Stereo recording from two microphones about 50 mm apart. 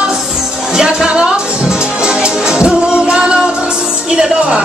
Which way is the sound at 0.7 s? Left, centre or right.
Centre.